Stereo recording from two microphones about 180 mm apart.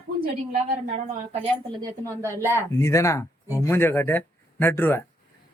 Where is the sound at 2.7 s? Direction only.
15° left (ahead or behind).